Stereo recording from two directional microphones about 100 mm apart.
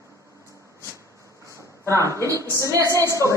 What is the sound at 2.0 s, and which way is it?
Speech, 35° right (ahead or behind).